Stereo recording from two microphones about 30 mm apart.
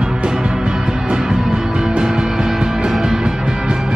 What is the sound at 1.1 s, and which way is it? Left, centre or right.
Music, right.